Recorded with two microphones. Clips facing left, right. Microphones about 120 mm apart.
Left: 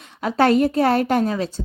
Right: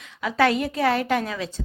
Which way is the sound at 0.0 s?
40° left (ahead or behind).